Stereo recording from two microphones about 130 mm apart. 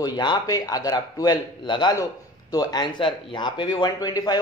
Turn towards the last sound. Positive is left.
turn(degrees=30)  # may be behind; listen again after turning